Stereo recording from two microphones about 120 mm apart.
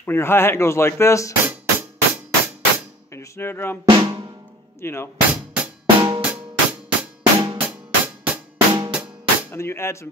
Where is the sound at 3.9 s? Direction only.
40° right (ahead or behind).